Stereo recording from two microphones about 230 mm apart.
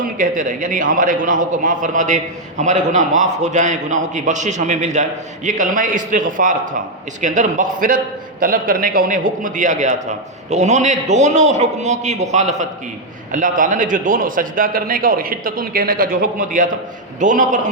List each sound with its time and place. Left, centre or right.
0.0 s a man's voice: right